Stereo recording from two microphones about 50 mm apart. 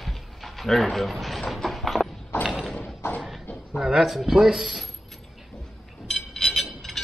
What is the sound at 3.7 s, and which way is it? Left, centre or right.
Speech, centre.